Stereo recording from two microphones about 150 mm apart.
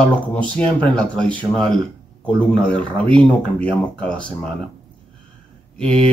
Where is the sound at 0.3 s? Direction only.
10° left (ahead or behind).